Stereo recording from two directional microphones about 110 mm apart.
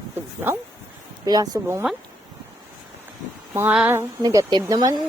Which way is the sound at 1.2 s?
35° right (ahead or behind).